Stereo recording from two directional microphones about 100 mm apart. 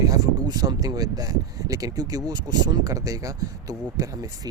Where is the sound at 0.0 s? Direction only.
35° right (ahead or behind).